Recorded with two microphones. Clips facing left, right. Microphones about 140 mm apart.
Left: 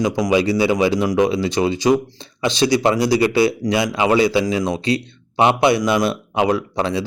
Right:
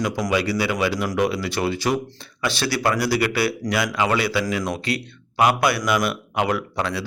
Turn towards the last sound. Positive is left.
turn(degrees=25)  # may be behind; listen again after turning